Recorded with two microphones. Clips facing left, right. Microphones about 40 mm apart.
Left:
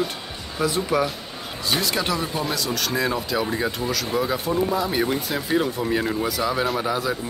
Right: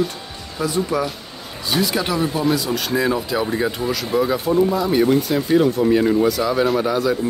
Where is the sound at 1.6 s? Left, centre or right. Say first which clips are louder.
Right 3 dB; centre.